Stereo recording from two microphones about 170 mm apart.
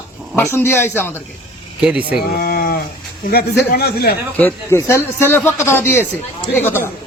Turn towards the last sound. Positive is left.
turn(degrees=15)  # may be behind; listen again after turning